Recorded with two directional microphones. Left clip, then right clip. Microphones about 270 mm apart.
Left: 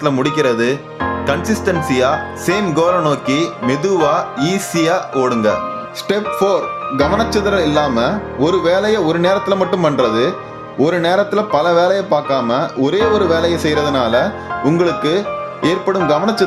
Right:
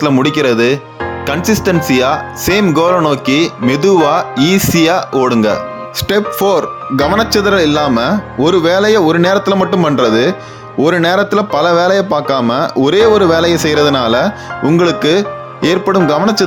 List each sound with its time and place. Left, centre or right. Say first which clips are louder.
0.0 s speech: right 3 dB; right